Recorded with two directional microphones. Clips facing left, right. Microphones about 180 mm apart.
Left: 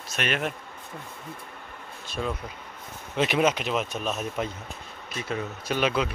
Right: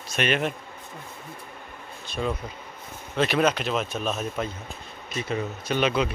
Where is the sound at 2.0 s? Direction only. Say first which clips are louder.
Right 2 dB; centre (ahead or behind).